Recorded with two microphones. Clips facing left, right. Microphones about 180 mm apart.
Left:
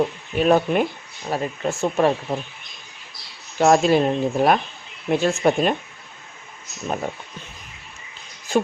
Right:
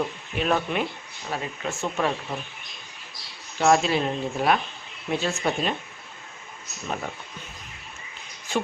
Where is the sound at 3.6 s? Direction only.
45° left (ahead or behind).